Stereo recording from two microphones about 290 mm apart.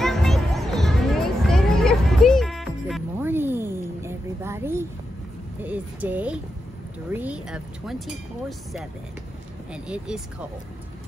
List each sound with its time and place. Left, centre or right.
0.0 s music: centre
5.6 s speech: centre